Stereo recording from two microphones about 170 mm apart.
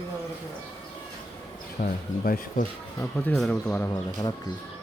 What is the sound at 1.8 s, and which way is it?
Speech, 55° left (ahead or behind).